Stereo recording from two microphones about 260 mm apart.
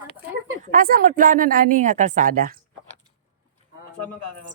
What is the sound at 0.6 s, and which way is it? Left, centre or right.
A woman's voice, right.